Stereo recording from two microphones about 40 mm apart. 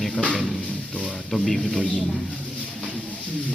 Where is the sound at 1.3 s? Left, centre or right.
Centre.